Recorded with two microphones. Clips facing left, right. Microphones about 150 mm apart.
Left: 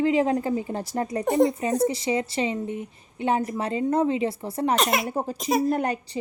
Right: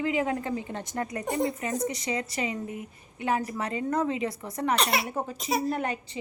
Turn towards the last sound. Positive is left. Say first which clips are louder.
# left 5 dB
turn(degrees=40)  # may be behind; listen again after turning